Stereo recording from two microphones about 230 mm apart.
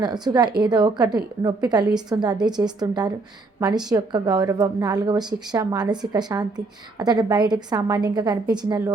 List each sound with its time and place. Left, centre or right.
0.0 s a woman's voice: centre